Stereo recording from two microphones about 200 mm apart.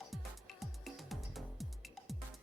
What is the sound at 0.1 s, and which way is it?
Music, centre (ahead or behind).